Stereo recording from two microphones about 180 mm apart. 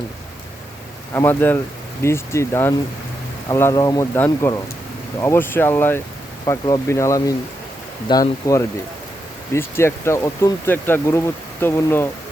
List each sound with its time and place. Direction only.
1.1 s speech: 10° left (ahead or behind)